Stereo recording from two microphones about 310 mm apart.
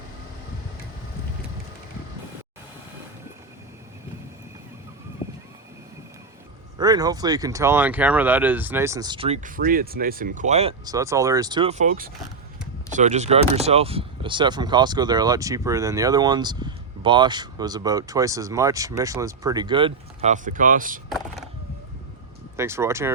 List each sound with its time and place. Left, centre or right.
5.2 s a sound: centre
6.7 s speech: centre
22.5 s speech: centre